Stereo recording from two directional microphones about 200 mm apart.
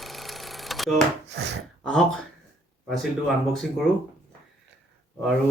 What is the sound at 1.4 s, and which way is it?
Speech, 55° right (ahead or behind).